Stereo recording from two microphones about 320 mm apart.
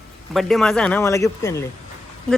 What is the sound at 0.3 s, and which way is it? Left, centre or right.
Speech, centre.